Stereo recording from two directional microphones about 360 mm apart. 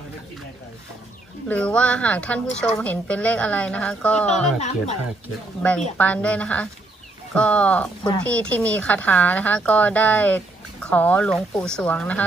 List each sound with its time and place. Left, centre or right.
1.5 s speech: centre
4.6 s speech: centre
5.6 s speech: centre